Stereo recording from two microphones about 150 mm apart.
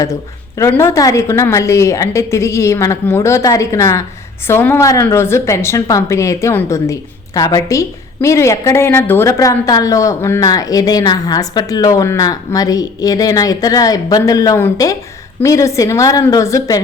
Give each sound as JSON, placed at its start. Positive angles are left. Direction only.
{"t": 0.0, "sound": "a woman's voice", "side_deg": 20}